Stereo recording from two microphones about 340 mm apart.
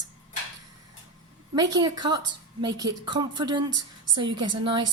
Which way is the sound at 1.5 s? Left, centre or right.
Centre.